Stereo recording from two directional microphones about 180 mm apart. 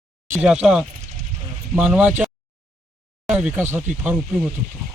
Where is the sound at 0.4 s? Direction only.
5° right (ahead or behind).